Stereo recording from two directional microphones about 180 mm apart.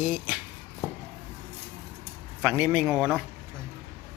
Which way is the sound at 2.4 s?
10° right (ahead or behind).